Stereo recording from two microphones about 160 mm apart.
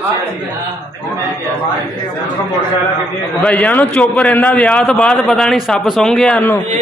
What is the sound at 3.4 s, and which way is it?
A man's voice, 10° left (ahead or behind).